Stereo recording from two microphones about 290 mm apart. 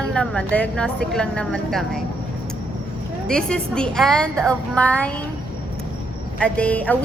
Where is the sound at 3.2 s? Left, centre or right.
Centre.